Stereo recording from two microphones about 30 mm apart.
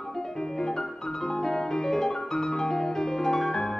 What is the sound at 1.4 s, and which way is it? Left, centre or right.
Music, centre.